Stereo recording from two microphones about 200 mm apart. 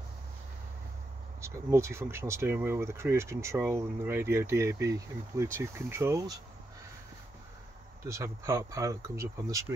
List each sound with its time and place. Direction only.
1.4 s speech: 15° right (ahead or behind)
8.0 s speech: 15° right (ahead or behind)